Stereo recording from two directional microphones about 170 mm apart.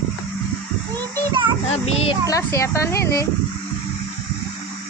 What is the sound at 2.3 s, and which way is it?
Speech, 15° left (ahead or behind).